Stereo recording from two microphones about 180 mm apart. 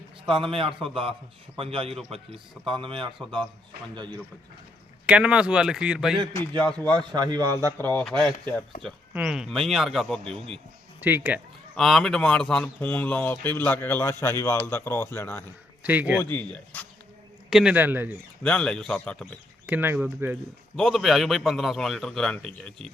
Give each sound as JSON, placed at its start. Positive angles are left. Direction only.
{"t": 0.3, "sound": "a man's voice", "side_deg": -30}
{"t": 5.0, "sound": "a man's voice", "side_deg": -5}
{"t": 6.6, "sound": "a man's voice", "side_deg": 5}
{"t": 7.1, "sound": "a man's voice", "side_deg": -20}
{"t": 8.2, "sound": "a man's voice", "side_deg": 10}
{"t": 8.8, "sound": "a man's voice", "side_deg": -5}
{"t": 11.0, "sound": "speech", "side_deg": -10}
{"t": 11.7, "sound": "a man's voice", "side_deg": 0}
{"t": 15.8, "sound": "speech", "side_deg": -10}
{"t": 16.3, "sound": "a man's voice", "side_deg": 10}
{"t": 17.5, "sound": "speech", "side_deg": -5}
{"t": 18.4, "sound": "a man's voice", "side_deg": 5}
{"t": 19.6, "sound": "speech", "side_deg": -10}
{"t": 20.7, "sound": "a man's voice", "side_deg": 0}